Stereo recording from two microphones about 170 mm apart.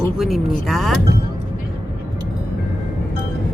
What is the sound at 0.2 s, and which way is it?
Speech, centre (ahead or behind).